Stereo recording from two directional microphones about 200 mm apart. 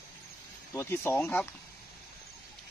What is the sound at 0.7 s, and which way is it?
Speech, 10° left (ahead or behind).